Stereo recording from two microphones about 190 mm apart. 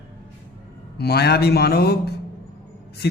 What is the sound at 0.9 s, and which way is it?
A man's voice, 60° left (ahead or behind).